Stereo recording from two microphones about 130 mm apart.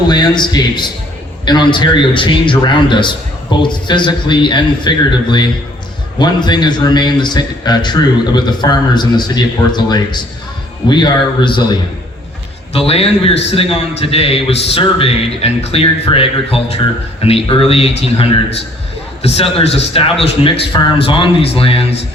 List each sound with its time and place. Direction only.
0.1 s a man's voice: 35° left (ahead or behind)
12.7 s a man's voice: 50° left (ahead or behind)